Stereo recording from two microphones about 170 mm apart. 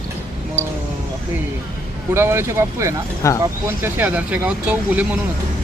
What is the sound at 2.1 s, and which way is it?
Speech, 15° right (ahead or behind).